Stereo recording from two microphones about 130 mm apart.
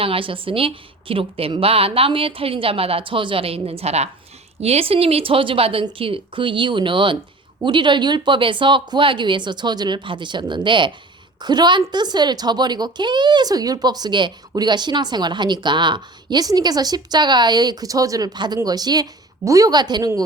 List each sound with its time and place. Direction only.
0.0 s a woman's voice: 45° right (ahead or behind)